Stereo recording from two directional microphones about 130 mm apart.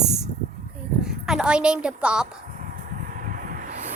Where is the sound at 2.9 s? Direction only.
90° right.